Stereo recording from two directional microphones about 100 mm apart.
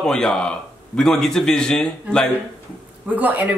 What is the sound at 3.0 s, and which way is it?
Speech, 15° right (ahead or behind).